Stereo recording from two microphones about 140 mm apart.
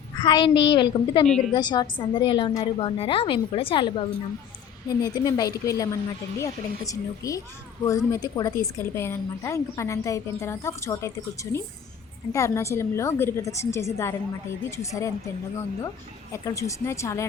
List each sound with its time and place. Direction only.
0.2 s speech: 30° left (ahead or behind)
1.3 s a woman's voice: 5° left (ahead or behind)
1.5 s a woman's voice: 30° left (ahead or behind)
12.3 s a woman's voice: 20° left (ahead or behind)
16.3 s a woman's voice: 25° left (ahead or behind)